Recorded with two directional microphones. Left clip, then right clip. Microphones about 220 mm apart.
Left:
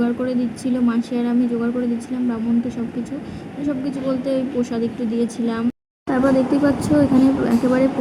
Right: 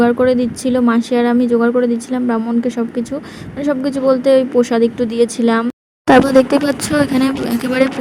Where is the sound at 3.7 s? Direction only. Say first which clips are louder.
Right 9 dB; 35° right (ahead or behind).